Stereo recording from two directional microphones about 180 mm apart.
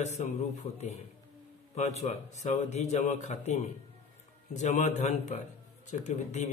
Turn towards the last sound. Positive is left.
turn(degrees=40)  # may be behind; listen again after turning